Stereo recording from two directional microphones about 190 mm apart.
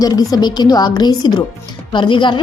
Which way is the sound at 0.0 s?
20° left (ahead or behind).